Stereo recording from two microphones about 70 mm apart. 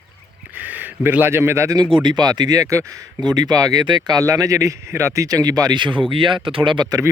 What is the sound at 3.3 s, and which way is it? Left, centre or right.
Speech, right.